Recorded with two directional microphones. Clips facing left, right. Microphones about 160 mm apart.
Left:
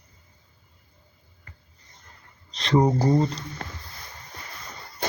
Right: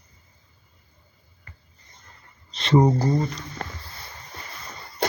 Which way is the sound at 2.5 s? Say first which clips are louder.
Right 2 dB; centre (ahead or behind).